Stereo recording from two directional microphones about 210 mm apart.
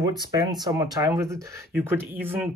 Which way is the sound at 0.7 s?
15° right (ahead or behind).